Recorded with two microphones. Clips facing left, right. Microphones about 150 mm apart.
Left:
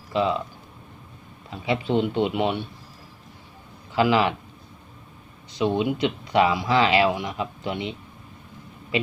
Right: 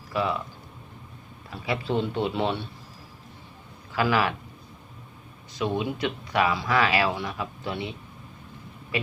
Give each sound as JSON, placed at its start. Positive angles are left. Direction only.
{"t": 0.1, "sound": "speech", "side_deg": 20}
{"t": 1.5, "sound": "speech", "side_deg": 20}
{"t": 3.9, "sound": "speech", "side_deg": 20}
{"t": 5.5, "sound": "speech", "side_deg": 20}